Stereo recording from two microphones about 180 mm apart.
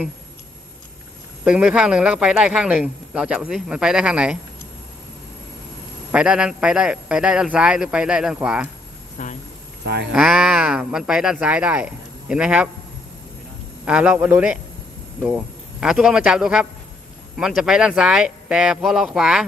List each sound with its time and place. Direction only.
1.5 s speech: 5° right (ahead or behind)
6.1 s speech: 5° right (ahead or behind)
9.1 s speech: 45° left (ahead or behind)
9.8 s speech: 70° right (ahead or behind)
10.2 s speech: 5° right (ahead or behind)
13.8 s a man's voice: 5° right (ahead or behind)
15.8 s speech: 5° right (ahead or behind)